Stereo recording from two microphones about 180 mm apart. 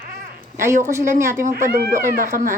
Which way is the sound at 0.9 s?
15° right (ahead or behind).